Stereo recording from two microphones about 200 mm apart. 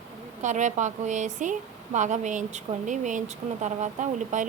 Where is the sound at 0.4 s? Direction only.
35° right (ahead or behind).